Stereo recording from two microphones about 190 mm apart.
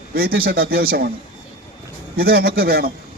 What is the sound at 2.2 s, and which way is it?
Speech, 55° right (ahead or behind).